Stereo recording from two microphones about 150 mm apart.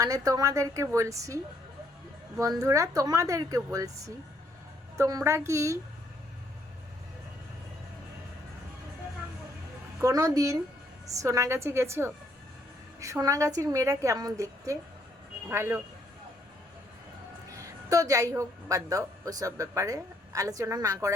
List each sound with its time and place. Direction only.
0.0 s a woman's voice: 25° right (ahead or behind)
2.4 s a woman's voice: 20° right (ahead or behind)
10.0 s a woman's voice: 20° right (ahead or behind)
17.8 s a woman's voice: 20° right (ahead or behind)